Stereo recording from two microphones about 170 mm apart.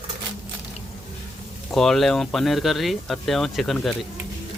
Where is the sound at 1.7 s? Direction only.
Centre (ahead or behind).